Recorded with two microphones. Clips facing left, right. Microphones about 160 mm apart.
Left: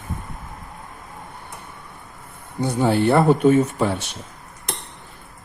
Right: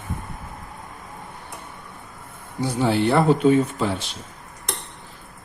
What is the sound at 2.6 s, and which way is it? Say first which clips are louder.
Speech: left 2 dB; 55° left (ahead or behind).